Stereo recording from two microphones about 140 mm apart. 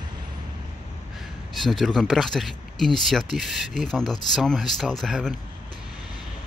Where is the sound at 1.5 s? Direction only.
Centre (ahead or behind).